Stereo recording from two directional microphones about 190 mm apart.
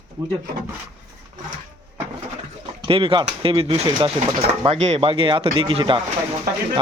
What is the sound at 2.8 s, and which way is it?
Speech, 30° right (ahead or behind).